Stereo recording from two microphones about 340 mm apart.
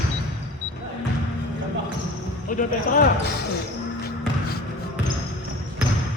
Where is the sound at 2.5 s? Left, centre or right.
Left.